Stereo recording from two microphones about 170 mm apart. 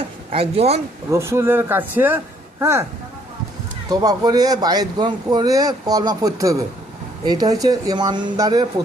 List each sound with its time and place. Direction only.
0.3 s speech: 35° right (ahead or behind)
1.1 s speech: 15° right (ahead or behind)
3.8 s speech: 20° right (ahead or behind)